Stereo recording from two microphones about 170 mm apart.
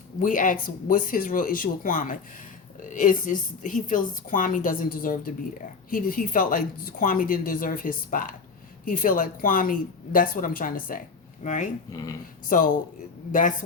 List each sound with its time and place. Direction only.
0.2 s a woman's voice: 50° left (ahead or behind)
11.9 s speech: 20° left (ahead or behind)
12.5 s a woman's voice: 55° left (ahead or behind)